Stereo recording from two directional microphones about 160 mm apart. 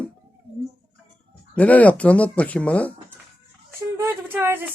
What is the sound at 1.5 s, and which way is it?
Speech, 10° left (ahead or behind).